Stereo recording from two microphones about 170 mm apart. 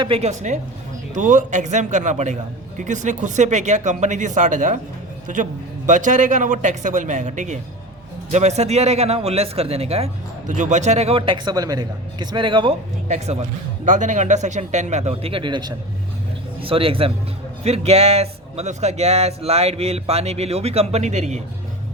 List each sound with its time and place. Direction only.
0.0 s a man's voice: 35° right (ahead or behind)
13.1 s a man's voice: 40° right (ahead or behind)